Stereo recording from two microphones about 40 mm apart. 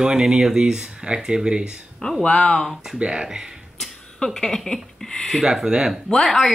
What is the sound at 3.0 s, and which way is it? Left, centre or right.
Speech, right.